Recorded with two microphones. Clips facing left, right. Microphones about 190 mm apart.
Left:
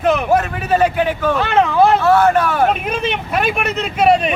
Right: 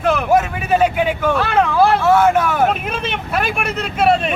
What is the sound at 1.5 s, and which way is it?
Speech, 5° left (ahead or behind).